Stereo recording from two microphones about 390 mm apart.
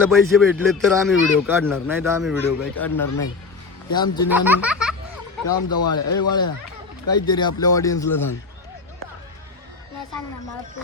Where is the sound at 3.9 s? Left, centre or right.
Centre.